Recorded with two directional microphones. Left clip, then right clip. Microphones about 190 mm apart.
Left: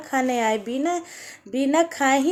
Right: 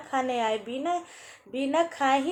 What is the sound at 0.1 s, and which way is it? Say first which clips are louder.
A woman's voice: left 5 dB; 50° left (ahead or behind).